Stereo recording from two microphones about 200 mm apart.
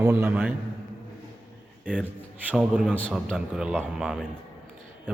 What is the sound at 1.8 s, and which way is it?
A man's voice, 5° right (ahead or behind).